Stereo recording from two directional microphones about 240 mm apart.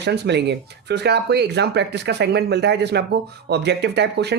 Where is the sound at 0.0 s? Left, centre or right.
Right.